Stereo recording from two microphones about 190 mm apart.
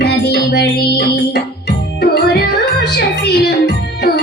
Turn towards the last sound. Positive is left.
turn(degrees=60)  # may be behind; listen again after turning